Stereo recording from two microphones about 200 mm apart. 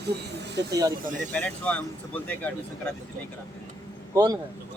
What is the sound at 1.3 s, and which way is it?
Speech, 5° left (ahead or behind).